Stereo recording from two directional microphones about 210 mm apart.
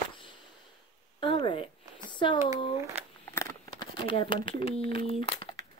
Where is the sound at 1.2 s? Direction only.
25° left (ahead or behind).